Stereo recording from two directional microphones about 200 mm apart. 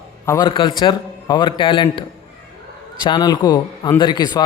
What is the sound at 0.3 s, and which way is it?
A man's voice, 20° left (ahead or behind).